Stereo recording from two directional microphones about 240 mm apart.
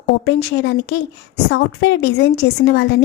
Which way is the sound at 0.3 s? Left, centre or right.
Left.